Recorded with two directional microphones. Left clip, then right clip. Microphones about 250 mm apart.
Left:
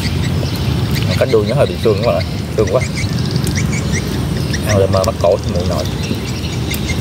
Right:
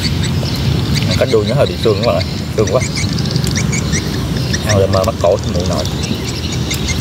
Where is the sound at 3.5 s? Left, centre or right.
Centre.